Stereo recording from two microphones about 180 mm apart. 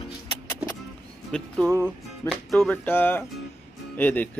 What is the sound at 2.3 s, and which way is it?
A man's voice, 5° left (ahead or behind).